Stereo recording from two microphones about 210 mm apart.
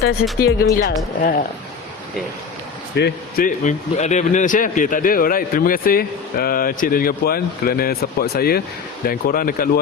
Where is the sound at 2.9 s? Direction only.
45° left (ahead or behind).